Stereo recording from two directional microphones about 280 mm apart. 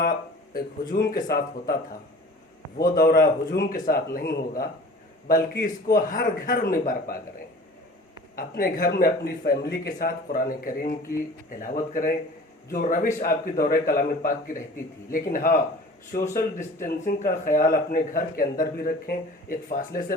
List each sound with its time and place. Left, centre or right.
0.5 s speech: left
2.7 s speech: left
8.4 s speech: left
16.8 s speech: left